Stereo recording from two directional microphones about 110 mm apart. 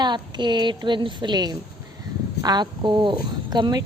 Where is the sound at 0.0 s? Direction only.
45° right (ahead or behind).